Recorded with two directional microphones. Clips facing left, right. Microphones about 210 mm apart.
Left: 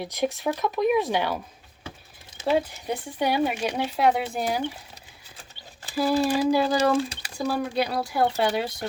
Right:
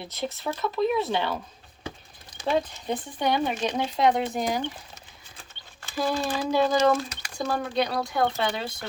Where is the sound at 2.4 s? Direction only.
10° left (ahead or behind).